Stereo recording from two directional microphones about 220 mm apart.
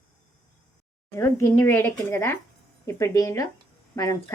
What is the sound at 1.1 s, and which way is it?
Speech, 15° left (ahead or behind).